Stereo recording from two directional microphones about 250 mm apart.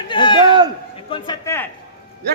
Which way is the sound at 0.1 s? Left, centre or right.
Centre.